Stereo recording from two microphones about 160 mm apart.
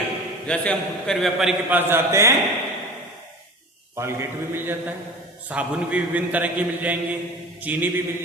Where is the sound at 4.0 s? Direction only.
15° right (ahead or behind).